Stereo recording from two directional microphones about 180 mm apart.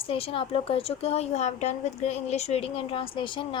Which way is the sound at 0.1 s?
30° left (ahead or behind).